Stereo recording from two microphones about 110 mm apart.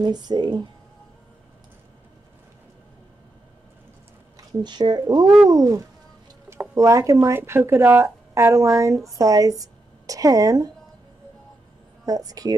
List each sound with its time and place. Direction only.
0.0 s speech: 40° right (ahead or behind)
4.5 s speech: 40° right (ahead or behind)
12.1 s speech: 35° right (ahead or behind)